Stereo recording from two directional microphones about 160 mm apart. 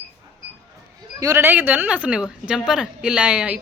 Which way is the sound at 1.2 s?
15° right (ahead or behind).